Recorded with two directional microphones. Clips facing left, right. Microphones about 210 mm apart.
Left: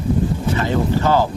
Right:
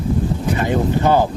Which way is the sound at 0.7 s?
15° right (ahead or behind).